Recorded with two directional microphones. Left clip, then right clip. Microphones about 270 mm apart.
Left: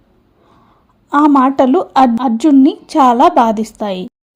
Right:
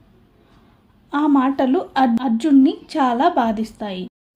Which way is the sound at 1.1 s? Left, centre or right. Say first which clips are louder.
Left 8 dB; left.